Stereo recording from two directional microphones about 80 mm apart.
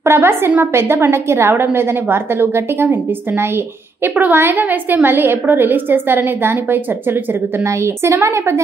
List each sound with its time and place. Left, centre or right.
0.0 s a woman's voice: right